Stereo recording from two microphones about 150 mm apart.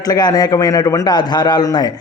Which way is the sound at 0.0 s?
25° left (ahead or behind).